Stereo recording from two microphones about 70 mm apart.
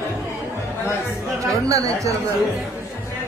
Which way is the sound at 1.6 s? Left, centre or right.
Right.